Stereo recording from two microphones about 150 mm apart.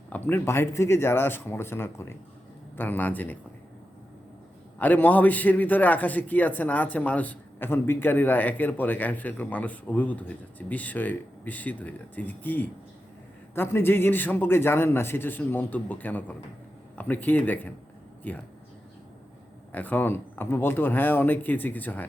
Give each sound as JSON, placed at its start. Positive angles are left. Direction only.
{"t": 0.1, "sound": "a man's voice", "side_deg": 15}
{"t": 4.8, "sound": "a man's voice", "side_deg": 10}
{"t": 19.7, "sound": "a man's voice", "side_deg": 10}